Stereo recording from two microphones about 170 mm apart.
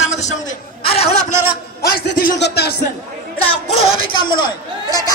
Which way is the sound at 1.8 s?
65° left (ahead or behind).